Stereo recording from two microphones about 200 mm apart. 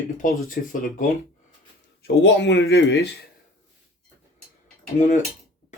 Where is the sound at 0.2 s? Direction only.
45° left (ahead or behind).